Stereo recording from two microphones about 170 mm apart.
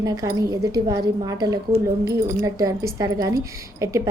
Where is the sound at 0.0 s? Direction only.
20° right (ahead or behind).